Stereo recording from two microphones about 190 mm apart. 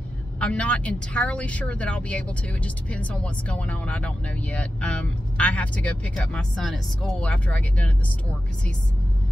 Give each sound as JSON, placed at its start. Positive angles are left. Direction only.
{"t": 0.4, "sound": "speech", "side_deg": 5}